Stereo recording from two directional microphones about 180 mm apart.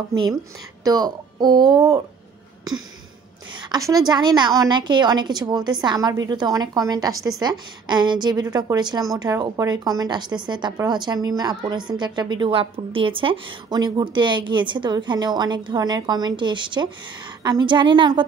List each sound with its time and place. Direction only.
0.8 s a woman's voice: 20° right (ahead or behind)
3.6 s a woman's voice: 20° right (ahead or behind)